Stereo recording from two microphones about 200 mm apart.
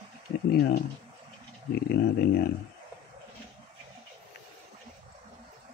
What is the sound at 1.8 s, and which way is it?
Speech, 55° left (ahead or behind).